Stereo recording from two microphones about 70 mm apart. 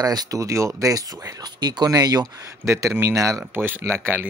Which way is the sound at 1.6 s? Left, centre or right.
Right.